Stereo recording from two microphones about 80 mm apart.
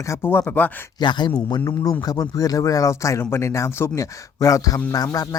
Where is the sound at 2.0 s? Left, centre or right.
Left.